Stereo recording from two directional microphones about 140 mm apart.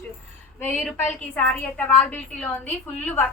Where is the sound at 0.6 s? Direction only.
10° left (ahead or behind).